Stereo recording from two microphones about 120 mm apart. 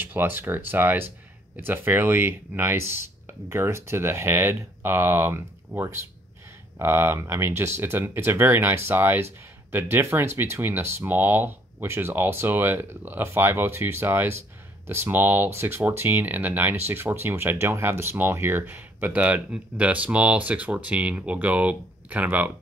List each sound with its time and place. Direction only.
0.0 s speech: 20° right (ahead or behind)